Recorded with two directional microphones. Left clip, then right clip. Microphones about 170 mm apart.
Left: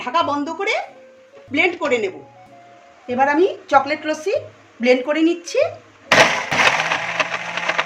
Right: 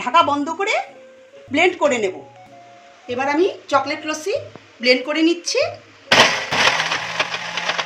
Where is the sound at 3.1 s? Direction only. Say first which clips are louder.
Left 3 dB; 50° left (ahead or behind).